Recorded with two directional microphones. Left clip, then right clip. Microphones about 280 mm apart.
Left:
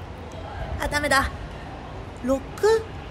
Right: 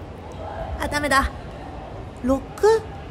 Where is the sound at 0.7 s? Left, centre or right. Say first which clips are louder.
Right 1 dB; centre.